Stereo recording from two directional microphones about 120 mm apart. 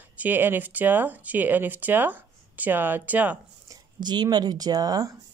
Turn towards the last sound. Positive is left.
turn(degrees=-30)  # may be behind; listen again after turning